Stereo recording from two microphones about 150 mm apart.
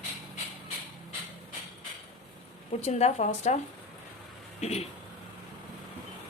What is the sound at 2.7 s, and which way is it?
Speech, 45° left (ahead or behind).